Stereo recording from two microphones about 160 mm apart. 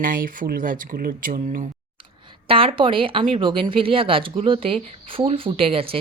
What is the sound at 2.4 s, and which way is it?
Speech, 35° right (ahead or behind).